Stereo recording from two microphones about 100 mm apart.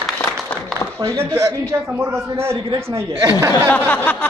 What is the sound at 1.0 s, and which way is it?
A man's voice, 30° right (ahead or behind).